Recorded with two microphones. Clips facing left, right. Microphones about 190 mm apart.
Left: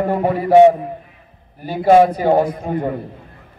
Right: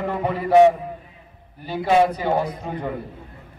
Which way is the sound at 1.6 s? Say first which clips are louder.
Left 6 dB; 50° left (ahead or behind).